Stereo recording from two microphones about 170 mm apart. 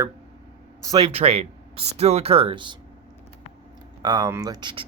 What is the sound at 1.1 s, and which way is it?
Speech, 35° right (ahead or behind).